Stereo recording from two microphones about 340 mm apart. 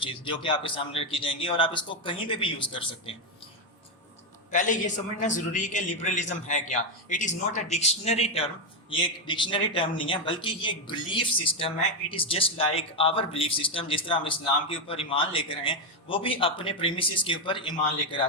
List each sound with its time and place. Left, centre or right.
0.0 s speech: centre
4.5 s a man's voice: left